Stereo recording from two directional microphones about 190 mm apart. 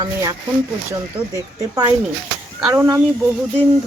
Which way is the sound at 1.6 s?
20° right (ahead or behind).